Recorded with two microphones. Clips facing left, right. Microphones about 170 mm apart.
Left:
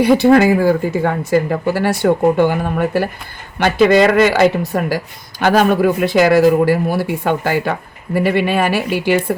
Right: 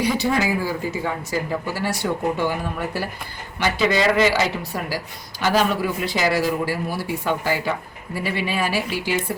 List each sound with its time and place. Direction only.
0.0 s speech: 60° left (ahead or behind)